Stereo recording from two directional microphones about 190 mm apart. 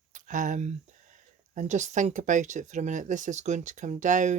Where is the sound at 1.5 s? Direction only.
40° right (ahead or behind).